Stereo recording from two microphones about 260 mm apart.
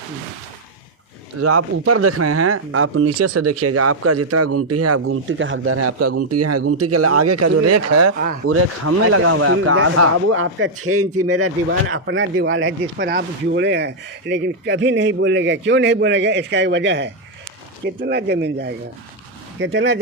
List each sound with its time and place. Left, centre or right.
1.4 s speech: right
8.4 s speech: right